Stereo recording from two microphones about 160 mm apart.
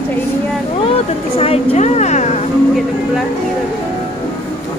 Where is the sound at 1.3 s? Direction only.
40° left (ahead or behind).